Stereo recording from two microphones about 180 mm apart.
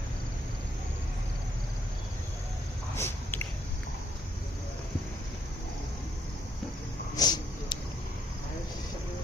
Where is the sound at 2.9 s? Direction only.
15° left (ahead or behind).